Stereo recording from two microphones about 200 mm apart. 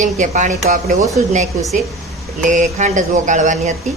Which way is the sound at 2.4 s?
35° right (ahead or behind).